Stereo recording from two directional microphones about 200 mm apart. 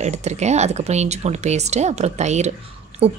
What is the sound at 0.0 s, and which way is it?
A woman's voice, 35° right (ahead or behind).